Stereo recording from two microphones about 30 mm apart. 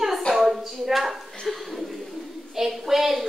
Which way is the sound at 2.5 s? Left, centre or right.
Centre.